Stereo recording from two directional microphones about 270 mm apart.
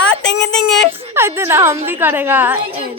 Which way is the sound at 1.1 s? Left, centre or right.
Centre.